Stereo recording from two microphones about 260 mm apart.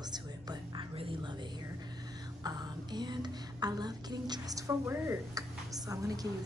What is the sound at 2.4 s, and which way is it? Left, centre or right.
Music, centre.